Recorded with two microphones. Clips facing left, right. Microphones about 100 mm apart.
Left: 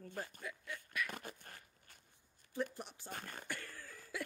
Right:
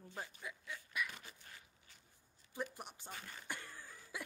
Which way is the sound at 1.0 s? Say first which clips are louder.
Left 3 dB; 50° left (ahead or behind).